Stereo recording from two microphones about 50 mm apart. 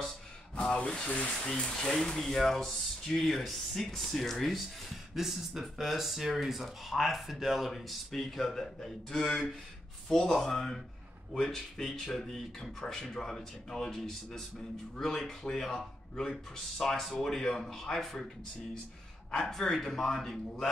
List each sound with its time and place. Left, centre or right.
0.6 s speech: centre
1.5 s speech: centre
15.4 s speech: centre
19.3 s speech: centre